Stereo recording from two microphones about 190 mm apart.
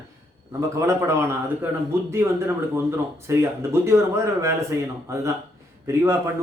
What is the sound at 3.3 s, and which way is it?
Speech, 15° right (ahead or behind).